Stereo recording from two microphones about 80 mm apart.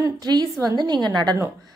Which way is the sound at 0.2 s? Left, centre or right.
Right.